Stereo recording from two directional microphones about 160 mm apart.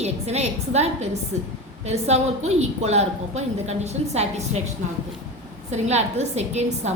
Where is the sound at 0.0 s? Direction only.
45° right (ahead or behind).